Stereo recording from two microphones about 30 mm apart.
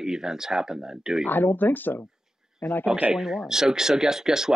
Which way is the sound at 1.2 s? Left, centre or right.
Left.